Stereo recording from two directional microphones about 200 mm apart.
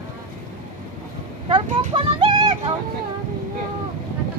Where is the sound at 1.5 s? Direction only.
25° right (ahead or behind).